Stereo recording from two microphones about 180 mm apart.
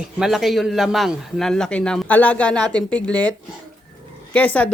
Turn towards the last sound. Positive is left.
turn(degrees=5)  # may be behind; listen again after turning